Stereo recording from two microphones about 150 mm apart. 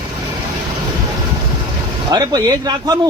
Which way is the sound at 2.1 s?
25° right (ahead or behind).